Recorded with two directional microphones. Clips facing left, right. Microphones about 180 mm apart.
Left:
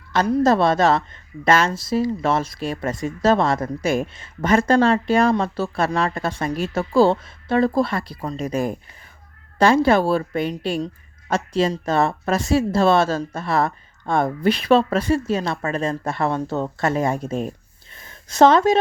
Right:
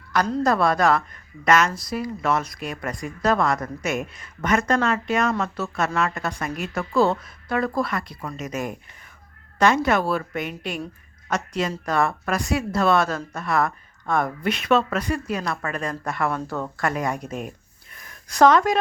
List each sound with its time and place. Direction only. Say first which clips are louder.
0.4 s a woman's voice: left 3 dB; 25° left (ahead or behind)